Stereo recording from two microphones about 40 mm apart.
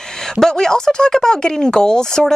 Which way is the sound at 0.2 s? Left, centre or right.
Centre.